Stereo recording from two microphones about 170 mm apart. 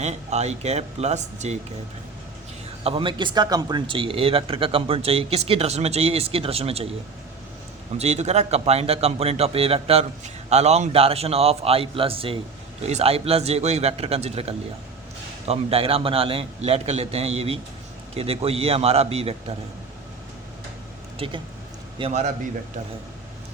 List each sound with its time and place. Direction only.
0.0 s a man's voice: 40° right (ahead or behind)
2.8 s a man's voice: 30° right (ahead or behind)
7.9 s a man's voice: 40° right (ahead or behind)
21.2 s a man's voice: 30° right (ahead or behind)